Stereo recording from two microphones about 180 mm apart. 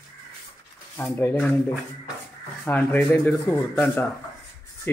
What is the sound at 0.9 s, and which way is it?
Speech, 10° left (ahead or behind).